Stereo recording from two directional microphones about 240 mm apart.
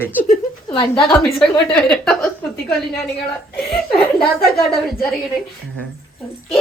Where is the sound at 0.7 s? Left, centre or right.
Left.